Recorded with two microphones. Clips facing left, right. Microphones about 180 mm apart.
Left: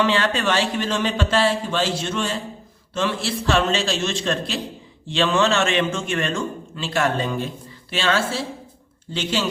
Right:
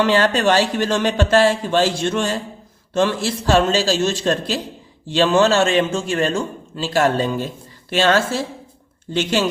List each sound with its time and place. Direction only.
0.0 s a man's voice: 45° right (ahead or behind)